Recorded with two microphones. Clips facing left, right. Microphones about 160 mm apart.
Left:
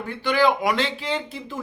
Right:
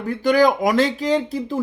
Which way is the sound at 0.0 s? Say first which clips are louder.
Right 5 dB; 40° right (ahead or behind).